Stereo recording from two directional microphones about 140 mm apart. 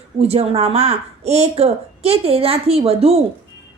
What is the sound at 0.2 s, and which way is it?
Speech, 45° right (ahead or behind).